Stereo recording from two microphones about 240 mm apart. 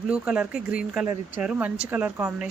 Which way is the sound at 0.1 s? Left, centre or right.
Centre.